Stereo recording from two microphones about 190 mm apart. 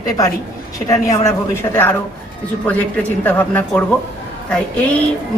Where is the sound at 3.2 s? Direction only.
10° left (ahead or behind).